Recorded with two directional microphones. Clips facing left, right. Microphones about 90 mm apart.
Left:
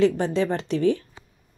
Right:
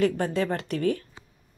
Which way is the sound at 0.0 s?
20° left (ahead or behind).